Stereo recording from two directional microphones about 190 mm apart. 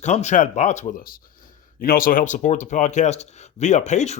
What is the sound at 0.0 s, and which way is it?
Speech, 35° left (ahead or behind).